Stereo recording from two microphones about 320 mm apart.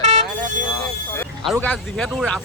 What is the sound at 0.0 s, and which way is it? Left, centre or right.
Vehicle, centre.